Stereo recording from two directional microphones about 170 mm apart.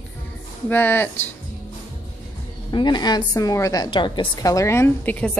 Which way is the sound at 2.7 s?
25° left (ahead or behind).